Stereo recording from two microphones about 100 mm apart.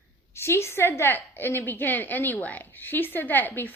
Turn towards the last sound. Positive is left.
turn(degrees=20)  # may be behind; listen again after turning